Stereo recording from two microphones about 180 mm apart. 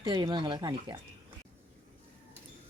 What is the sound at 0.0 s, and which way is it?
Speech, 25° right (ahead or behind).